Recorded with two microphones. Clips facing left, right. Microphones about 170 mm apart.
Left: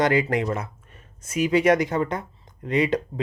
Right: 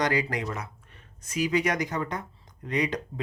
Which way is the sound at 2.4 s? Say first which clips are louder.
Left 6 dB; 25° left (ahead or behind).